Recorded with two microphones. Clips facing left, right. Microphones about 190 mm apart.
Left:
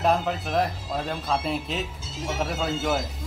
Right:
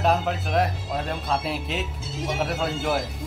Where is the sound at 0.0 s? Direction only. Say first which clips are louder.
Even; centre (ahead or behind).